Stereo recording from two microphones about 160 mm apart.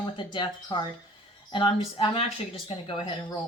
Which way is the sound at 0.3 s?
30° left (ahead or behind).